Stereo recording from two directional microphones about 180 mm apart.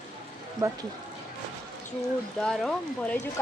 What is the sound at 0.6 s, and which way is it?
Speech, 15° right (ahead or behind).